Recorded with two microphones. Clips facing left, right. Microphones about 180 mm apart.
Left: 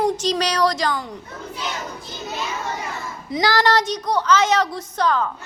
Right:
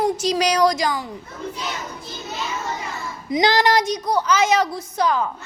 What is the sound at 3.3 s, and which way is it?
A woman's voice, 15° right (ahead or behind).